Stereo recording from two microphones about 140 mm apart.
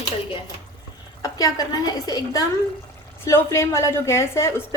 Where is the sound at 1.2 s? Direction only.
25° left (ahead or behind).